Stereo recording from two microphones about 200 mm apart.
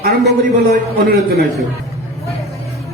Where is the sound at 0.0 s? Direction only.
50° right (ahead or behind).